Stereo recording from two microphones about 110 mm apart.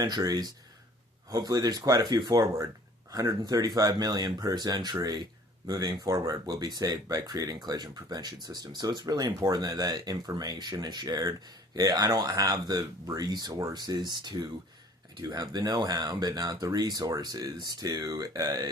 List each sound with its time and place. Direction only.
0.0 s speech: 35° right (ahead or behind)